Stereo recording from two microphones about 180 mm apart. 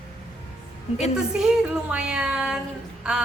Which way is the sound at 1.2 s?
5° right (ahead or behind).